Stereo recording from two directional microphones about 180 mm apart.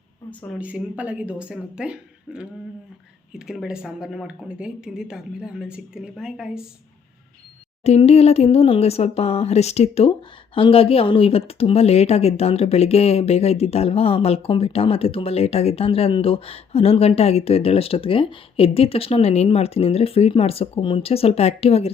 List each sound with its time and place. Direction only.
0.6 s speech: 10° right (ahead or behind)
7.9 s speech: 35° left (ahead or behind)